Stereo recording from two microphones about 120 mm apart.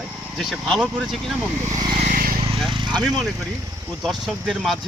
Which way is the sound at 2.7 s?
40° right (ahead or behind).